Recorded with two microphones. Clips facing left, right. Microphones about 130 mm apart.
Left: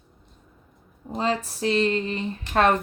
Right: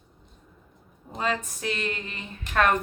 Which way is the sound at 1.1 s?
30° left (ahead or behind).